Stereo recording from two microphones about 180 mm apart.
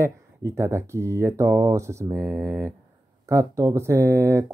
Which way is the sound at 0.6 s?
15° right (ahead or behind).